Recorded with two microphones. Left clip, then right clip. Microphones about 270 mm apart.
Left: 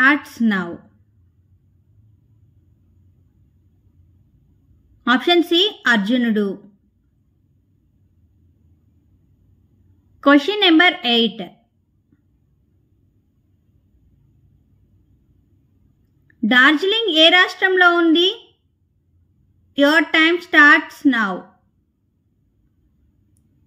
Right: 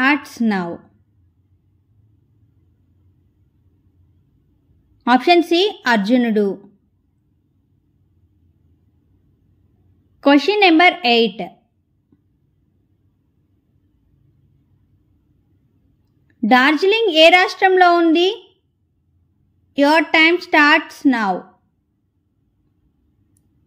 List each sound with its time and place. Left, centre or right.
0.3 s a woman's voice: centre
5.0 s a woman's voice: centre
10.2 s a woman's voice: centre
16.3 s a woman's voice: centre
19.8 s a woman's voice: centre